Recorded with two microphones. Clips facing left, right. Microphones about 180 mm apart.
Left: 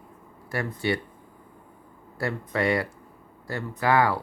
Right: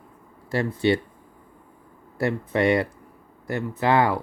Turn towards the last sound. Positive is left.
turn(degrees=-20)  # may be behind; listen again after turning